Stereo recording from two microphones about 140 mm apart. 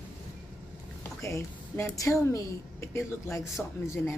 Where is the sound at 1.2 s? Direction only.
20° left (ahead or behind).